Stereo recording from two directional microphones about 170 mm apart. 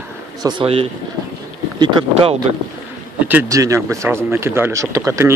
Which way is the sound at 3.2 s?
10° right (ahead or behind).